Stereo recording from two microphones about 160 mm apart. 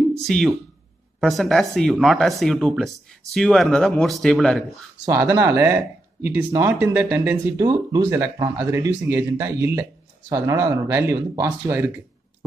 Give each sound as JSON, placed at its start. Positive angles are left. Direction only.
{"t": 0.2, "sound": "speech", "side_deg": 0}
{"t": 5.0, "sound": "speech", "side_deg": -20}
{"t": 7.5, "sound": "speech", "side_deg": -20}